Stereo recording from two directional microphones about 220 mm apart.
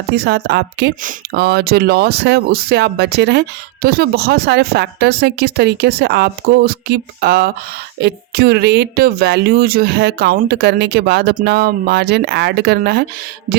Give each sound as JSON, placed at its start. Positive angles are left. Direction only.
{"t": 0.2, "sound": "speech", "side_deg": -45}